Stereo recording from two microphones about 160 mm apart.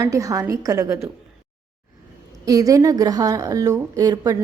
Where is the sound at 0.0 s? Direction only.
20° right (ahead or behind).